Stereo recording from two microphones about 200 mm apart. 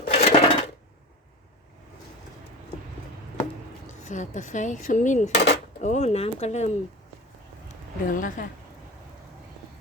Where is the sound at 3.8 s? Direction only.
35° left (ahead or behind).